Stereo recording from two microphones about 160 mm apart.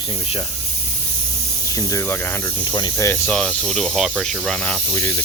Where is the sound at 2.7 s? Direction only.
30° left (ahead or behind).